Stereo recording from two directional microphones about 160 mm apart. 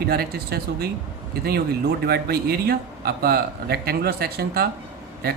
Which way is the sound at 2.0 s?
85° right.